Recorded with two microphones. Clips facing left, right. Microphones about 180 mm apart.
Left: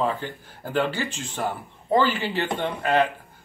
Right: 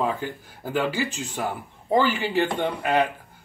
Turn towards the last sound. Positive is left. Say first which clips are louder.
# even
turn(degrees=-10)  # may be behind; listen again after turning